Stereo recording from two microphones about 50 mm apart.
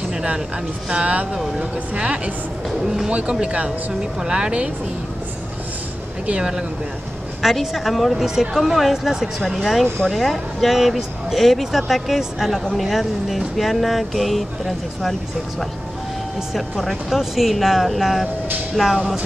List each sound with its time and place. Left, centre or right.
0.1 s vehicle: centre
0.8 s speech: right
2.8 s speech: centre
3.1 s speech: right
6.2 s speech: right
7.4 s speech: centre
16.5 s speech: centre